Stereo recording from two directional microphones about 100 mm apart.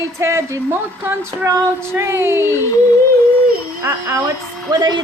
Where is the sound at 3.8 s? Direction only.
30° right (ahead or behind).